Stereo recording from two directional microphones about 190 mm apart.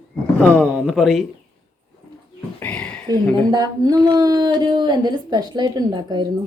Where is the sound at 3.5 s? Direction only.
20° right (ahead or behind).